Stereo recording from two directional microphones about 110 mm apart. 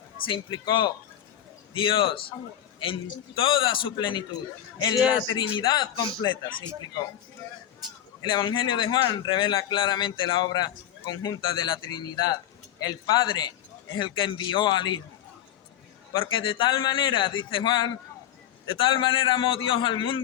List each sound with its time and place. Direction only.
0.3 s speech: 45° left (ahead or behind)
5.2 s speech: 45° left (ahead or behind)
8.2 s a man's voice: 45° left (ahead or behind)
16.1 s speech: 50° left (ahead or behind)